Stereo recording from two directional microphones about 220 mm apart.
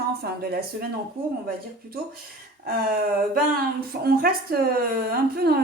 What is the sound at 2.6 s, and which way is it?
Speech, 40° right (ahead or behind).